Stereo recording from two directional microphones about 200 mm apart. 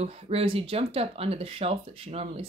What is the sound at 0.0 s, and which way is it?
Speech, 30° right (ahead or behind).